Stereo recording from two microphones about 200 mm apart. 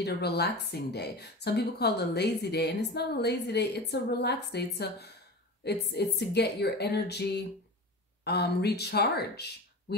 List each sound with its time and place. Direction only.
0.0 s a woman's voice: 55° left (ahead or behind)